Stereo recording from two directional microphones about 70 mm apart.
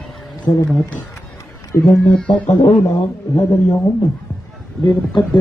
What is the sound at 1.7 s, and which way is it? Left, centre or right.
Speech, left.